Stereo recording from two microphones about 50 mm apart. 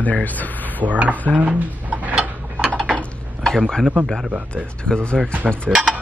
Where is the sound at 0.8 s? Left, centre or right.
Right.